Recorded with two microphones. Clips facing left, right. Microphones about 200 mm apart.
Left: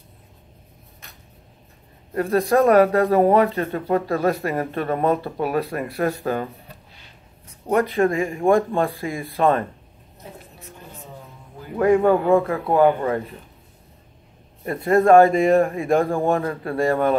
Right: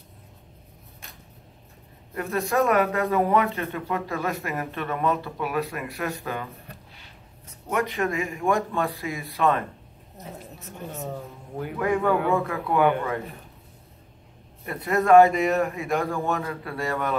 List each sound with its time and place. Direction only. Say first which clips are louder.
2.1 s speech: left 6 dB; 35° left (ahead or behind)
7.6 s speech: left 7 dB; 35° left (ahead or behind)
8.7 s speech: left 5 dB; 50° left (ahead or behind)
9.4 s speech: left 4 dB; 35° left (ahead or behind)
10.6 s speech: right 6 dB; 45° right (ahead or behind)
11.8 s speech: left 7 dB; 30° left (ahead or behind)
14.6 s speech: left 7 dB; 35° left (ahead or behind)